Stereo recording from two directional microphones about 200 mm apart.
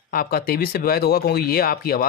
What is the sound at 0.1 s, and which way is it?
Speech, 50° left (ahead or behind).